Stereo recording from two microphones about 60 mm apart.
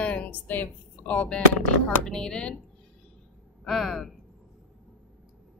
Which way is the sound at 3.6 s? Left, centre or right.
Centre.